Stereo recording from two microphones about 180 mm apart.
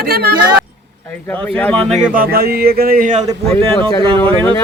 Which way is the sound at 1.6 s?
5° left (ahead or behind).